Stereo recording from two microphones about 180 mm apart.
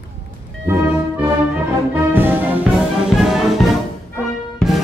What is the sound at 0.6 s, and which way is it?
Music, 15° right (ahead or behind).